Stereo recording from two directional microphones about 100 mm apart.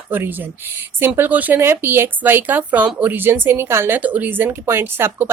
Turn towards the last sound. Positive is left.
turn(degrees=-20)  # may be behind; listen again after turning